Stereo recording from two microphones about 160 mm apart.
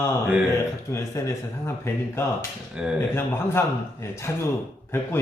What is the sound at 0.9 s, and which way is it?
Speech, 20° left (ahead or behind).